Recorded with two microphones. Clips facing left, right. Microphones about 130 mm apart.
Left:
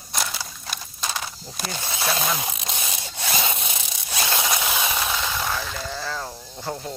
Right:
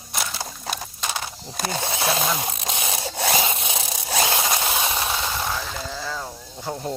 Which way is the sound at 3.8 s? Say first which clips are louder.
Right 6 dB; 45° right (ahead or behind).